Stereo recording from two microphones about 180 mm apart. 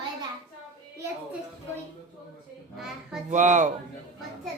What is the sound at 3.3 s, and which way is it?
Speech, 45° right (ahead or behind).